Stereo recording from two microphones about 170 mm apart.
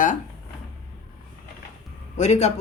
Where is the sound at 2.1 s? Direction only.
45° left (ahead or behind).